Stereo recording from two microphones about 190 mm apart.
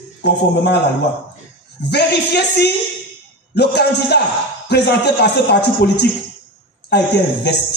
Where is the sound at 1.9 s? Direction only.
60° left (ahead or behind).